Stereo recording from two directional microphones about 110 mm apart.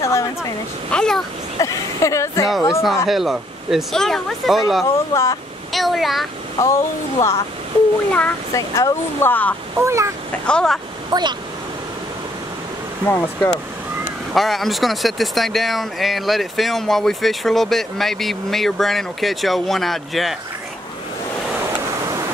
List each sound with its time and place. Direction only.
0.0 s speech: 25° left (ahead or behind)
0.9 s speech: 5° left (ahead or behind)
1.6 s speech: 30° left (ahead or behind)
2.7 s speech: centre (ahead or behind)
5.1 s speech: 25° left (ahead or behind)
5.7 s speech: centre (ahead or behind)
6.6 s speech: 25° left (ahead or behind)
8.5 s speech: 30° left (ahead or behind)
9.8 s speech: 25° right (ahead or behind)
10.4 s speech: 5° left (ahead or behind)
11.1 s speech: 40° right (ahead or behind)
13.0 s speech: 15° left (ahead or behind)
14.3 s speech: centre (ahead or behind)